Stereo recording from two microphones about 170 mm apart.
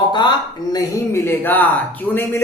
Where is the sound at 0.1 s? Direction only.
25° left (ahead or behind).